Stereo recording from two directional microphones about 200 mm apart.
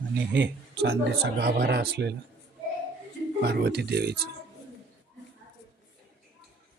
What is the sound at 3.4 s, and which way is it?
Speech, 55° right (ahead or behind).